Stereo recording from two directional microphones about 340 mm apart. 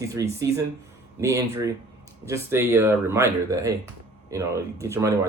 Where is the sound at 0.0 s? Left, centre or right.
Centre.